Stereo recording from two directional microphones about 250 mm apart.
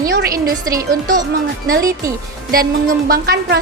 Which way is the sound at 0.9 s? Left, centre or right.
Right.